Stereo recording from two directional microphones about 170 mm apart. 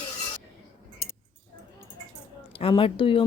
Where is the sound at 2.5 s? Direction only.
30° left (ahead or behind).